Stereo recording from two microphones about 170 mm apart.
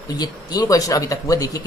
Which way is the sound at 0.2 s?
25° left (ahead or behind).